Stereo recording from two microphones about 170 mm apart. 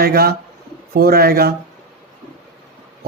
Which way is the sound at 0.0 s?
60° right (ahead or behind).